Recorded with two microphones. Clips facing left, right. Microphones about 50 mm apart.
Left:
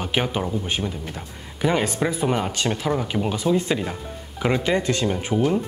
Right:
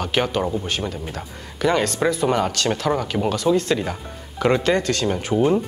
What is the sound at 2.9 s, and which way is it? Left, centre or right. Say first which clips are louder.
Speech: right 2 dB; centre.